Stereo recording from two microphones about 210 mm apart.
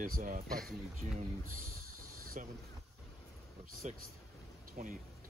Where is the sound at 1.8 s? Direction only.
40° right (ahead or behind).